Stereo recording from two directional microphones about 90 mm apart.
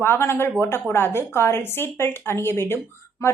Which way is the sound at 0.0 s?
25° left (ahead or behind).